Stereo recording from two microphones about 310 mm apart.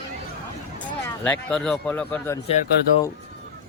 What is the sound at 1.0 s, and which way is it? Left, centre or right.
Speech, centre.